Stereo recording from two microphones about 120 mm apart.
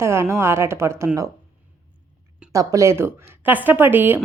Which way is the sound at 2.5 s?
25° right (ahead or behind).